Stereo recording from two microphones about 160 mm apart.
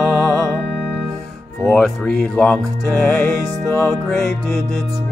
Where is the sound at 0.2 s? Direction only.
20° left (ahead or behind).